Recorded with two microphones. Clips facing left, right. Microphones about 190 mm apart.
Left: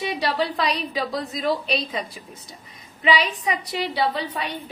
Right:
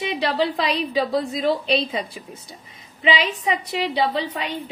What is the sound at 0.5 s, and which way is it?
A woman's voice, 25° right (ahead or behind).